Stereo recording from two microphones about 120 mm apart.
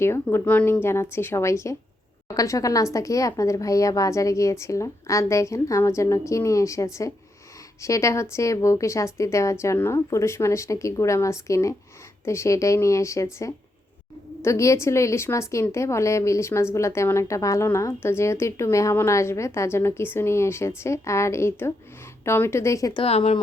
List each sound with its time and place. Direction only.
0.0 s a woman's voice: 20° left (ahead or behind)
23.0 s a woman's voice: 55° left (ahead or behind)